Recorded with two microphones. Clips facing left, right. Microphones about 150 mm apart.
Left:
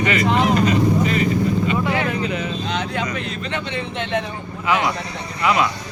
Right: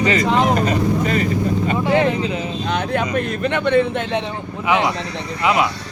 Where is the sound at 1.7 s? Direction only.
30° right (ahead or behind).